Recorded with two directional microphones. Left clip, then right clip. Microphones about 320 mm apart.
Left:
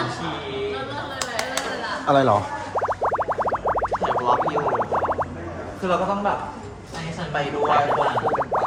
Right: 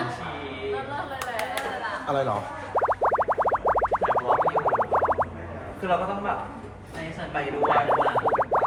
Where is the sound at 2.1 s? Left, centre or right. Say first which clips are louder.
Left 9 dB; left.